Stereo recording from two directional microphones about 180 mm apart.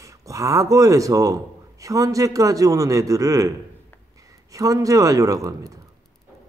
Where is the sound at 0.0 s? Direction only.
20° right (ahead or behind).